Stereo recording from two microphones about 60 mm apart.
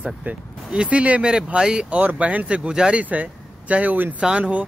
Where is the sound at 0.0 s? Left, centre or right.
Right.